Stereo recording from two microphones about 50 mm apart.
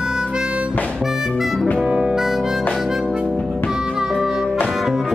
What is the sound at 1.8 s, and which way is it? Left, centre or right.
Harmonica, right.